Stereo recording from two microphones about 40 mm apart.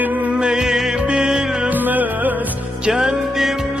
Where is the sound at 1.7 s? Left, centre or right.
Right.